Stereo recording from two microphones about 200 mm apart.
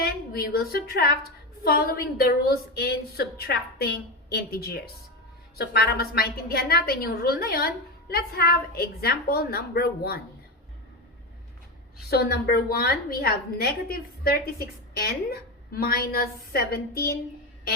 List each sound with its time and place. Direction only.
0.0 s a woman's voice: 50° left (ahead or behind)
12.0 s a woman's voice: 55° left (ahead or behind)